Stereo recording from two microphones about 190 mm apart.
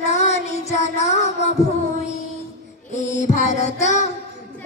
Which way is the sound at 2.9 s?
40° left (ahead or behind).